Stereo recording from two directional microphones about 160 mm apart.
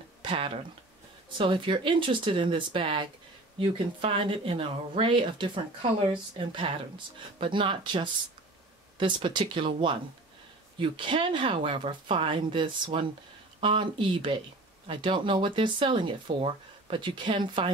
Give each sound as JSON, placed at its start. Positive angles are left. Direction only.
{"t": 0.2, "sound": "speech", "side_deg": -35}